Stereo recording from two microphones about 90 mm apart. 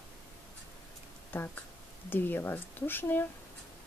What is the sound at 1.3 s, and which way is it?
Speech, 25° left (ahead or behind).